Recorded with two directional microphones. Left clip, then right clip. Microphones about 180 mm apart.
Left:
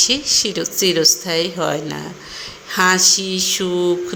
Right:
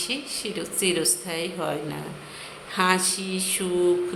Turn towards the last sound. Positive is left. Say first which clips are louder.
# left 5 dB
turn(degrees=25)  # may be behind; listen again after turning